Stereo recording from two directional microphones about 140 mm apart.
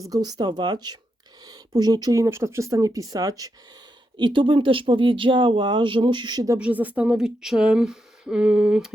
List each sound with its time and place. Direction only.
0.1 s speech: 30° right (ahead or behind)
4.2 s speech: 35° right (ahead or behind)
6.6 s a woman's voice: 10° right (ahead or behind)